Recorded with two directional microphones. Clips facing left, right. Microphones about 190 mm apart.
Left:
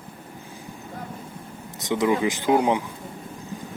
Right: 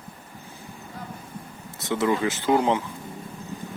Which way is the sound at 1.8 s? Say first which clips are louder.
Left 2 dB; 15° left (ahead or behind).